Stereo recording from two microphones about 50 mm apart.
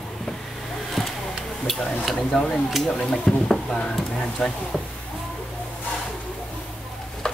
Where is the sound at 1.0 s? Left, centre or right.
Centre.